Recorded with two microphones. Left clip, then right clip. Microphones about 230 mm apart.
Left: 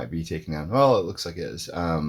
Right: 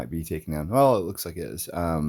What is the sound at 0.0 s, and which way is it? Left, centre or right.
Speech, right.